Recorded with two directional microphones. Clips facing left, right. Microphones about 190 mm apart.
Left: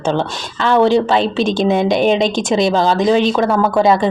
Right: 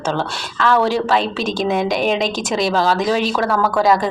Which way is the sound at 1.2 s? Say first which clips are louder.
Left 5 dB; 5° right (ahead or behind).